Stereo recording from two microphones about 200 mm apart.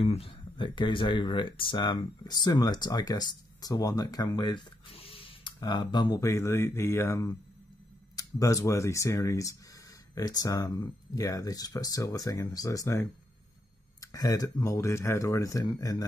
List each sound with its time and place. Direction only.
0.0 s speech: 30° left (ahead or behind)